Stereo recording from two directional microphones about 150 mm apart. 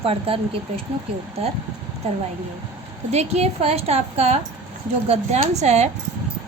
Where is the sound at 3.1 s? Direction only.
45° right (ahead or behind).